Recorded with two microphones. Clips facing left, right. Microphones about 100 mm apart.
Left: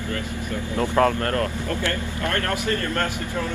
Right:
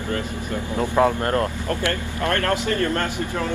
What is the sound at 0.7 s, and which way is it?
Speech, 15° right (ahead or behind).